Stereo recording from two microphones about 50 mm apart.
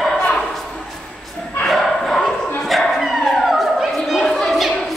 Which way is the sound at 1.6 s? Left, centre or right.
Centre.